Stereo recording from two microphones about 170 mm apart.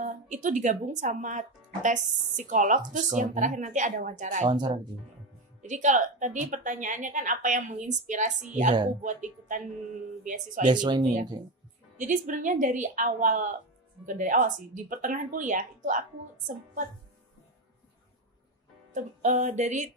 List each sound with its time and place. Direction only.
0.0 s a woman's voice: 50° right (ahead or behind)
4.5 s speech: 25° right (ahead or behind)
5.6 s a woman's voice: 45° right (ahead or behind)
10.7 s speech: 25° right (ahead or behind)
12.0 s a woman's voice: 45° right (ahead or behind)
18.9 s a woman's voice: 45° right (ahead or behind)